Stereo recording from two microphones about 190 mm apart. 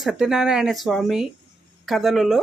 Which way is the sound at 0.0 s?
5° right (ahead or behind).